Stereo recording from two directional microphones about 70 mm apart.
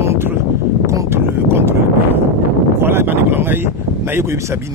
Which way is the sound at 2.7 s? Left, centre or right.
Right.